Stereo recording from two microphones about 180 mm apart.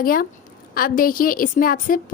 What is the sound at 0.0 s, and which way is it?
A woman's voice, 55° left (ahead or behind).